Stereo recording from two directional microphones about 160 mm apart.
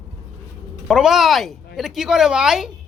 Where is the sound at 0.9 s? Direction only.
5° right (ahead or behind).